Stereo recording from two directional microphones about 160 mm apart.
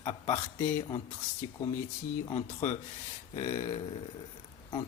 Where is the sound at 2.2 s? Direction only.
25° left (ahead or behind).